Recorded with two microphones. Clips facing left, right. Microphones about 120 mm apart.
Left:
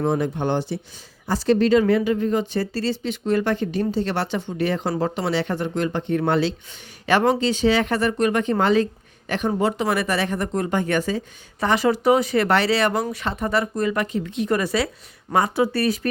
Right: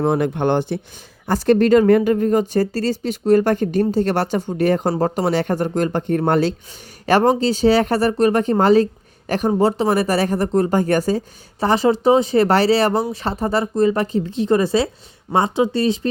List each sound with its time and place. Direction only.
0.1 s speech: 60° right (ahead or behind); by 16.0 s 25° right (ahead or behind)